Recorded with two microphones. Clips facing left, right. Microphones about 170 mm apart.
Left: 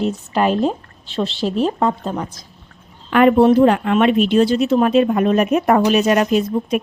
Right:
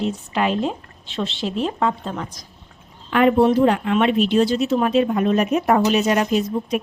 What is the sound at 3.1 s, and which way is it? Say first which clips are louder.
Speech: left 4 dB; 60° left (ahead or behind).